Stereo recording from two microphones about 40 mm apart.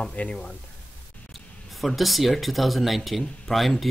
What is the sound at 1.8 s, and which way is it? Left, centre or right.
Speech, centre.